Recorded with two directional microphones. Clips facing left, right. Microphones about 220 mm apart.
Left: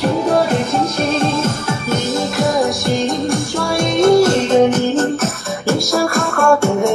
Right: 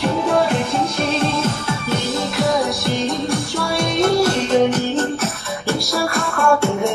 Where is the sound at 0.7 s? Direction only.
45° left (ahead or behind).